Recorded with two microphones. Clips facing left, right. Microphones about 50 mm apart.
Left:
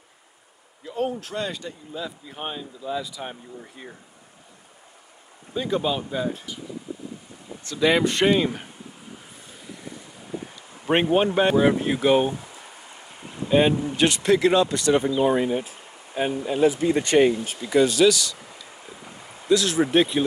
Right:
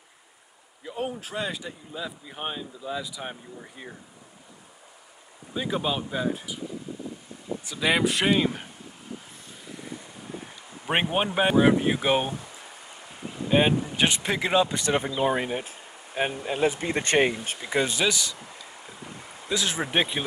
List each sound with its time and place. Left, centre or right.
0.8 s speech: centre
5.5 s speech: centre
7.6 s speech: centre
10.9 s speech: centre
13.5 s speech: centre
15.3 s speech: right
16.6 s speech: right
17.6 s speech: right
19.5 s speech: centre